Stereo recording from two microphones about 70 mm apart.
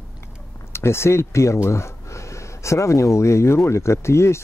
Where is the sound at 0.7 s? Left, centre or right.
Left.